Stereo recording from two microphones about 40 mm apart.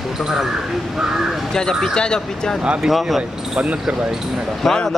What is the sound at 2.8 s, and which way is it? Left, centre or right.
Speech, centre.